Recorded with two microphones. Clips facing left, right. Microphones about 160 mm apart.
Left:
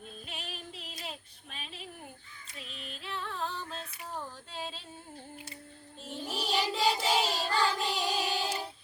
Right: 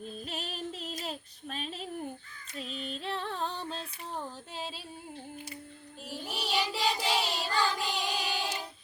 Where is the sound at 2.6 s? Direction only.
35° right (ahead or behind).